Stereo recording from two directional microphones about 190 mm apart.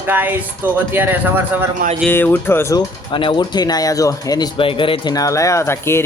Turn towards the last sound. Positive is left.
turn(degrees=15)  # may be behind; listen again after turning